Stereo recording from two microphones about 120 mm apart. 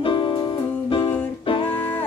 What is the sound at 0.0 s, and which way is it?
Music, 45° left (ahead or behind).